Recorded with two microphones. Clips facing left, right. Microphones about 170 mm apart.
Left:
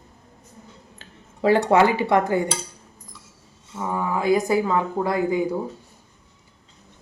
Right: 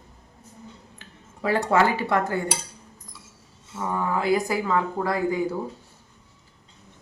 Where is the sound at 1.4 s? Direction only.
25° left (ahead or behind).